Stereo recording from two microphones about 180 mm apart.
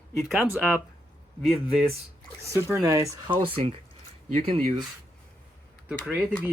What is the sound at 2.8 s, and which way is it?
Speech, 15° right (ahead or behind).